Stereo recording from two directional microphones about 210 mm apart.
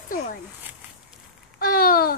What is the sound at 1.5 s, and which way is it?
Speech, 45° left (ahead or behind).